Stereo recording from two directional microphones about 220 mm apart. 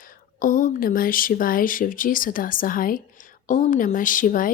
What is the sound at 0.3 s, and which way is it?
Speech, 40° left (ahead or behind).